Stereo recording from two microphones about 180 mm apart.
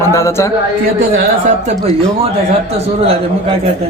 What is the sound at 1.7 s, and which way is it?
Speech, 35° right (ahead or behind).